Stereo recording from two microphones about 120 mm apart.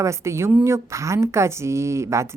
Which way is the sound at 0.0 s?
25° right (ahead or behind).